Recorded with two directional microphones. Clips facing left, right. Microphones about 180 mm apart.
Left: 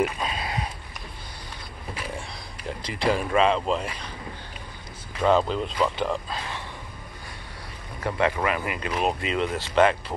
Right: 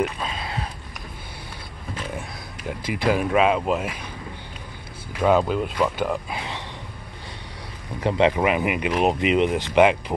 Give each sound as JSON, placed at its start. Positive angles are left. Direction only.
{"t": 0.0, "sound": "a sound", "side_deg": 10}
{"t": 2.1, "sound": "a sound", "side_deg": -5}
{"t": 3.1, "sound": "speech", "side_deg": -5}
{"t": 5.2, "sound": "speech", "side_deg": -5}
{"t": 6.3, "sound": "speech", "side_deg": -20}
{"t": 8.0, "sound": "speech", "side_deg": -20}